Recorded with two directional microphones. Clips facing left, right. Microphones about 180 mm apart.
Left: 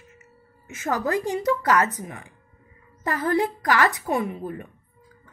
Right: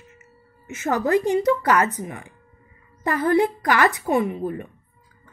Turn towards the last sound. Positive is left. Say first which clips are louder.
# right 5 dB
turn(degrees=-25)  # may be behind; listen again after turning